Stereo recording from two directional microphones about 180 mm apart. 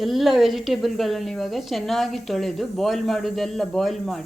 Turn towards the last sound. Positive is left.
turn(degrees=0)  # may be behind; listen again after turning